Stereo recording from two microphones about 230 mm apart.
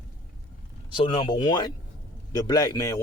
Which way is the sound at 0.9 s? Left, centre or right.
Left.